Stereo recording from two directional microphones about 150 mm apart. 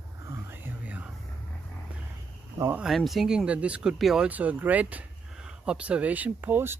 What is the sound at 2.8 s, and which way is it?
Speech, centre (ahead or behind).